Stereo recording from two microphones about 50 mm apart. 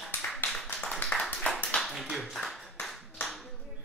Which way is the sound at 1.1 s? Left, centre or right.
Left.